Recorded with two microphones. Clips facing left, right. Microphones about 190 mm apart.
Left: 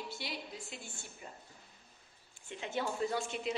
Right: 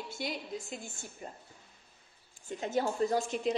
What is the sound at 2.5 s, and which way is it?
A woman's voice, 40° right (ahead or behind).